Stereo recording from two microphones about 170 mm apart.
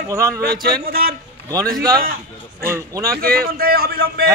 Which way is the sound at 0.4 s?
70° right (ahead or behind).